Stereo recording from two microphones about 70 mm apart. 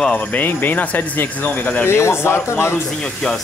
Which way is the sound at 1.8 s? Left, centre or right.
Left.